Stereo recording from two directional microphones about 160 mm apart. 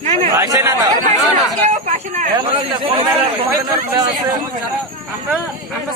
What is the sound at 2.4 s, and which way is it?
Speech, 35° right (ahead or behind).